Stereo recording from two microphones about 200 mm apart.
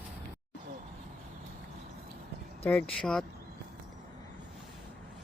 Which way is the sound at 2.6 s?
5° left (ahead or behind).